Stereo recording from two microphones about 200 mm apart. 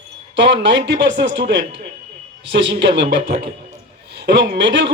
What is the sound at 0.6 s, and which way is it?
A man's voice, 60° right (ahead or behind).